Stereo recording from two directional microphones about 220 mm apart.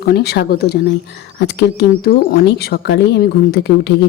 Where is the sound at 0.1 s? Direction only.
45° left (ahead or behind).